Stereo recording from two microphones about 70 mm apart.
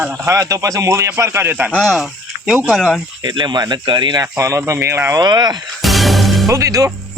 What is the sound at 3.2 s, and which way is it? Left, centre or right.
Speech, right.